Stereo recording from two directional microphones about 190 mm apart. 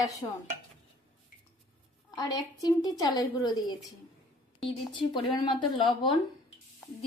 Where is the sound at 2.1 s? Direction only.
20° left (ahead or behind).